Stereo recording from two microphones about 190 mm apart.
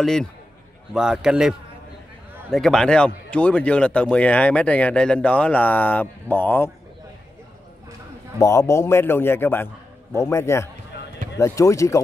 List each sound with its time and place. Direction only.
0.0 s speech: 5° left (ahead or behind)
2.5 s speech: centre (ahead or behind)
8.4 s speech: 15° left (ahead or behind)